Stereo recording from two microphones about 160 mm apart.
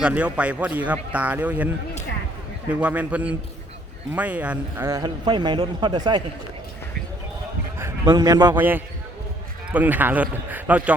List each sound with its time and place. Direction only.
0.0 s a man's voice: 5° right (ahead or behind); by 6.2 s 25° right (ahead or behind)
7.8 s a sound: 15° right (ahead or behind)
8.5 s a man's voice: 10° right (ahead or behind)